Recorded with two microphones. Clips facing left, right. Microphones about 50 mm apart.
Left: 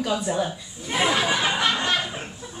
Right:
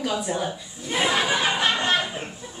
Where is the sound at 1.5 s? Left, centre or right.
Right.